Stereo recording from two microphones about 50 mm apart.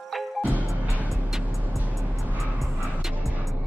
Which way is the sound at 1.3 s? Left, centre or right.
Centre.